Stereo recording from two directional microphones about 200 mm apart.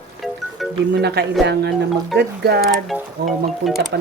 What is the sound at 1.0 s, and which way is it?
Speech, 55° right (ahead or behind).